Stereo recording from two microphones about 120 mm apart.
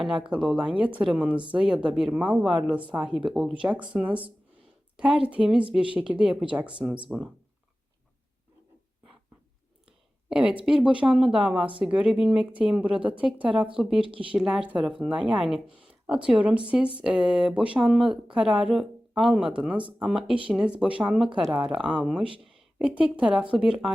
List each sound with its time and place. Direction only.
0.0 s speech: 5° right (ahead or behind)
10.2 s speech: 5° right (ahead or behind)
14.1 s speech: 45° right (ahead or behind)
14.3 s speech: 5° right (ahead or behind)